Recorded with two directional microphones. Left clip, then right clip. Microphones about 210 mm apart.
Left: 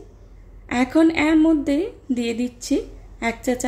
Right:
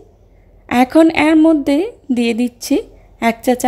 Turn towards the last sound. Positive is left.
turn(degrees=-35)  # may be behind; listen again after turning